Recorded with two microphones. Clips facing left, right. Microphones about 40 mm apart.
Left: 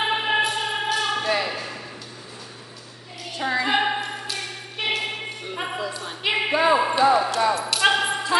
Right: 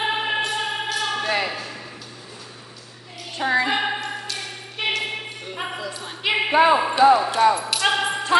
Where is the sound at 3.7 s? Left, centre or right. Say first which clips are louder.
Left 1 dB; centre.